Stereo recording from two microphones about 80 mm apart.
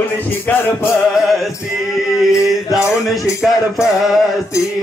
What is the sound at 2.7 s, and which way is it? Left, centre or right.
Music, left.